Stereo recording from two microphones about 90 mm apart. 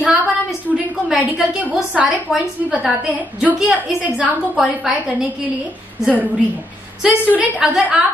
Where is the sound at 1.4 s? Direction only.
15° right (ahead or behind).